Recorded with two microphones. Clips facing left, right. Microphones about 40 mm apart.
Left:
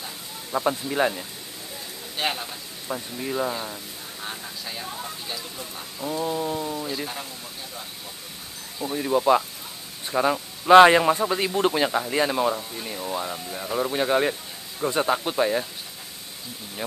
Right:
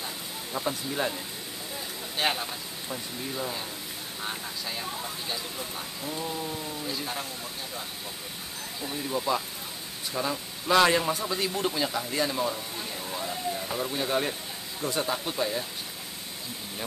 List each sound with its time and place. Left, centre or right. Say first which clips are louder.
0.5 s speech: left 7 dB; left
2.1 s speech: even; centre
2.9 s speech: left 7 dB; left
4.2 s speech: even; centre
5.9 s speech: left 8 dB; centre
6.9 s speech: left 2 dB; centre
8.8 s a man's voice: left 9 dB; left